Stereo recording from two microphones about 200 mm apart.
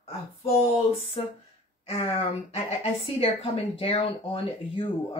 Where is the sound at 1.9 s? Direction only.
30° left (ahead or behind).